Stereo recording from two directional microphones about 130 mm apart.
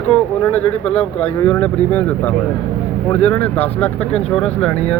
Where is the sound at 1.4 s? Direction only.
10° left (ahead or behind).